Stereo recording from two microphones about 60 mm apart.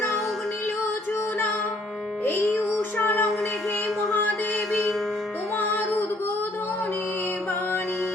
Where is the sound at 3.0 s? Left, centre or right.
Left.